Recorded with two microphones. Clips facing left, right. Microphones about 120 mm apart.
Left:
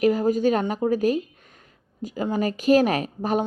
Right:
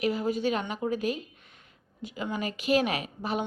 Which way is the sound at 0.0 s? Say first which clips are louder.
Left 8 dB; 45° left (ahead or behind).